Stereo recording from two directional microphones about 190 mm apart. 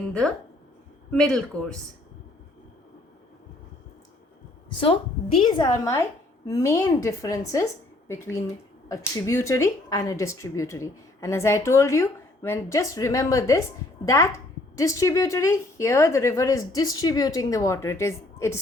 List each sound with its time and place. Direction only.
0.1 s speech: 5° left (ahead or behind)
5.4 s a woman's voice: 25° left (ahead or behind)